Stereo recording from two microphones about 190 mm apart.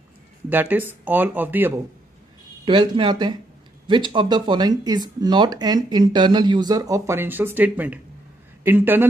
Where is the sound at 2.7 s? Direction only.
25° right (ahead or behind).